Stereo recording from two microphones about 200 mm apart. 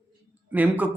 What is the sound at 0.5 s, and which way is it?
Speech, 10° right (ahead or behind).